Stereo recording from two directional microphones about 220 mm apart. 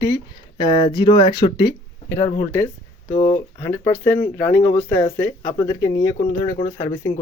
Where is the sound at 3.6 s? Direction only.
10° left (ahead or behind).